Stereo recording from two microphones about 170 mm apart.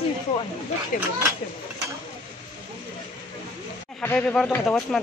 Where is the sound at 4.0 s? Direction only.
10° left (ahead or behind).